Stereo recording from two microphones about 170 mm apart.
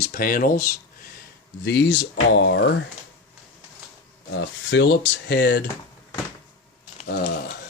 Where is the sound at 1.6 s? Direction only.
80° left.